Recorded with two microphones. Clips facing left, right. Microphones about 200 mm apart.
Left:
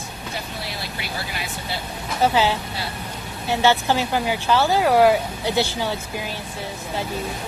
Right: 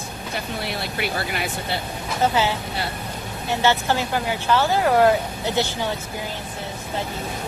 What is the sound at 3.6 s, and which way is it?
Speech, 15° left (ahead or behind).